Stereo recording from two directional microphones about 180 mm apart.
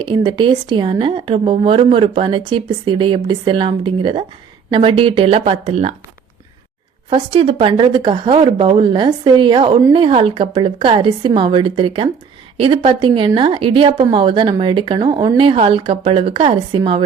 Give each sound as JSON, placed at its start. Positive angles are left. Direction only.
{"t": 0.0, "sound": "a woman's voice", "side_deg": -25}
{"t": 7.1, "sound": "a woman's voice", "side_deg": -30}